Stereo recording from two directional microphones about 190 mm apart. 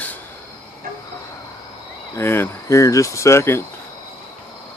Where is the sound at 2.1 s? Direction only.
15° left (ahead or behind).